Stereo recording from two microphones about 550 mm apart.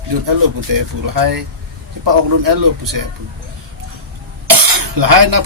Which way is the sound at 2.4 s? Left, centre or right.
Right.